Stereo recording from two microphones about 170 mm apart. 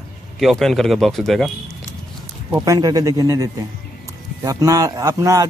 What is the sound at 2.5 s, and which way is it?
Speech, 20° right (ahead or behind).